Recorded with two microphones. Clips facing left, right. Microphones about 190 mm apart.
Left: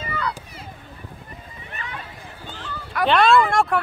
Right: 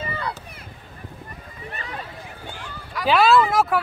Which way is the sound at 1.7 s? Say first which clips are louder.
Right 1 dB; 35° right (ahead or behind).